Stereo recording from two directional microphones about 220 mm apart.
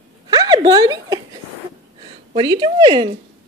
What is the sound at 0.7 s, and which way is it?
Speech, 15° right (ahead or behind).